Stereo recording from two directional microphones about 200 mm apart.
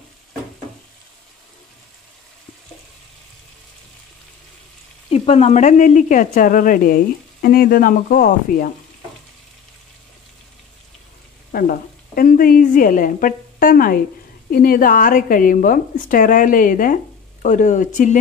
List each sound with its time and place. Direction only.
5.1 s a woman's voice: 30° left (ahead or behind)
11.5 s a woman's voice: 45° left (ahead or behind)